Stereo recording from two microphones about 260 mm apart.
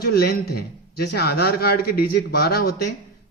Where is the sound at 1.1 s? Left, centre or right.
Left.